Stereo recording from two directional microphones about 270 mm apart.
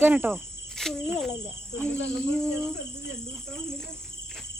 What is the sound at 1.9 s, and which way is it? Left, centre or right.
Cricket, left.